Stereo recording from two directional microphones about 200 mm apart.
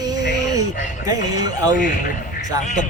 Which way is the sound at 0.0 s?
20° right (ahead or behind).